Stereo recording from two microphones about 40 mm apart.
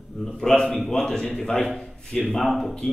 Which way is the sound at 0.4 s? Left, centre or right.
Centre.